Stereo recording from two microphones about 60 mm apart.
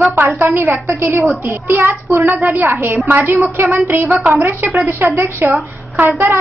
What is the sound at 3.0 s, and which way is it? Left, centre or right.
A woman's voice, right.